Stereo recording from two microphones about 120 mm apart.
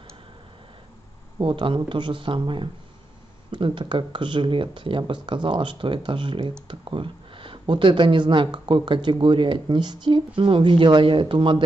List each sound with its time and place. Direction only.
1.4 s speech: 45° right (ahead or behind)